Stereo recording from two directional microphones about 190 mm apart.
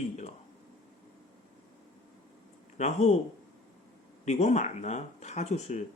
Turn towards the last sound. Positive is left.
turn(degrees=35)  # may be behind; listen again after turning